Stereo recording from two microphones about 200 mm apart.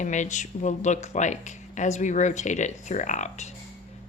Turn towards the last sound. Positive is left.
turn(degrees=35)  # may be behind; listen again after turning